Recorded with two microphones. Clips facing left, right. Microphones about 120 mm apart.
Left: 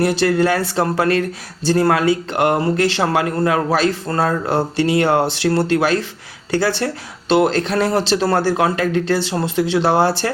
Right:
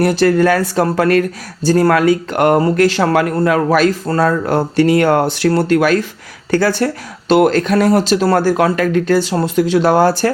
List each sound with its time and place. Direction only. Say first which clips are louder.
0.0 s speech: right 4 dB; 45° right (ahead or behind)